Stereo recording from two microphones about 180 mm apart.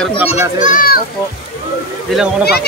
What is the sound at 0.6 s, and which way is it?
Speech, 50° left (ahead or behind).